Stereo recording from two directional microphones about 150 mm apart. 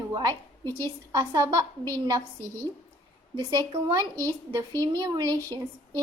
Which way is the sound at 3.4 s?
25° right (ahead or behind).